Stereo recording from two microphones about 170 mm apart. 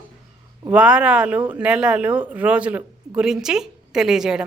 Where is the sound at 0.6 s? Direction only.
5° right (ahead or behind).